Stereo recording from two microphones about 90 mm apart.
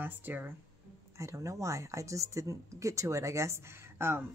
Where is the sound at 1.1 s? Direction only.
35° right (ahead or behind).